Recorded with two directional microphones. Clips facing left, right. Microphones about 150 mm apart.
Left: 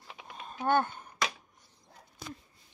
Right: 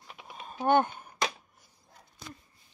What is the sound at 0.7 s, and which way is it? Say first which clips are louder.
Speech: right 3 dB; 15° right (ahead or behind).